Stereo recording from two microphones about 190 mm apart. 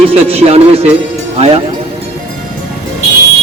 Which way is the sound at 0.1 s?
30° right (ahead or behind).